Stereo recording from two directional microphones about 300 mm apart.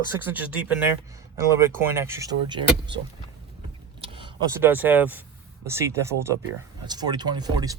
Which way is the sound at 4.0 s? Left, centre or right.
Centre.